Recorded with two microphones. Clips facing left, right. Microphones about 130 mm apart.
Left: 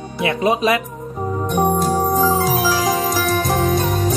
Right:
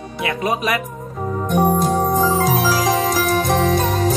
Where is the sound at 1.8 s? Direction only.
5° left (ahead or behind).